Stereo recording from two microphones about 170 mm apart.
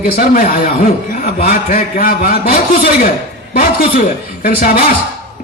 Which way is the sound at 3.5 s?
60° left (ahead or behind).